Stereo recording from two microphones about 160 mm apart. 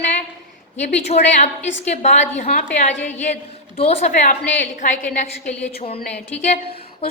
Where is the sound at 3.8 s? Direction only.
40° left (ahead or behind).